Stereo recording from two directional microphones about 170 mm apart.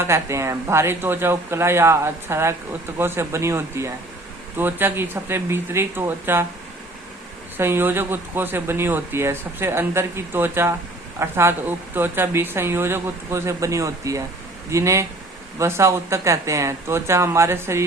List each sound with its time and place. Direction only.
0.0 s speech: 15° right (ahead or behind)
7.5 s speech: 15° right (ahead or behind)